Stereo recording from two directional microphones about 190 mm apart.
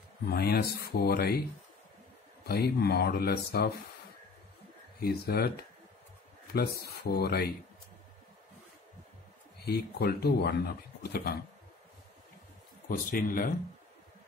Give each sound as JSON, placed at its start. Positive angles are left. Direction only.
{"t": 0.3, "sound": "speech", "side_deg": 55}
{"t": 2.4, "sound": "speech", "side_deg": 55}
{"t": 5.0, "sound": "speech", "side_deg": 55}
{"t": 6.5, "sound": "speech", "side_deg": 55}
{"t": 9.7, "sound": "speech", "side_deg": 55}
{"t": 12.8, "sound": "speech", "side_deg": 50}